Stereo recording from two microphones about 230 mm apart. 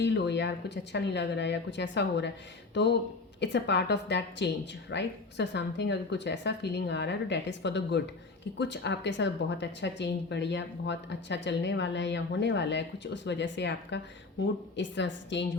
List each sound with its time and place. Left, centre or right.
0.0 s speech: left